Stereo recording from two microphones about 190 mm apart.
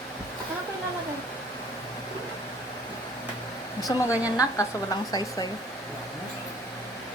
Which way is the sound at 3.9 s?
20° left (ahead or behind).